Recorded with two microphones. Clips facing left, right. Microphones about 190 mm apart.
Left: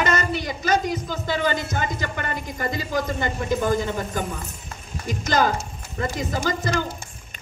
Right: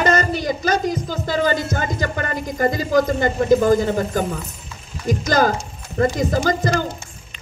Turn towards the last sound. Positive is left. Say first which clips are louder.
# right 5 dB
turn(degrees=-40)  # may be behind; listen again after turning